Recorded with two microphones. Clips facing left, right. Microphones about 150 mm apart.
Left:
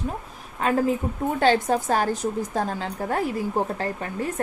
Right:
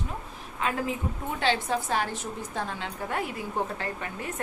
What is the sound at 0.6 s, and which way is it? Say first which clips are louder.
A woman's voice: left 7 dB; 45° left (ahead or behind).